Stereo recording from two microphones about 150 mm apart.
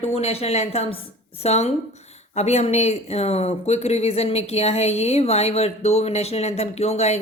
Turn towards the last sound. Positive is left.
turn(degrees=45)  # may be behind; listen again after turning